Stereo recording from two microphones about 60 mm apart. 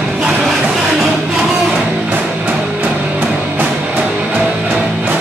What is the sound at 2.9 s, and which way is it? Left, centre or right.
Music, right.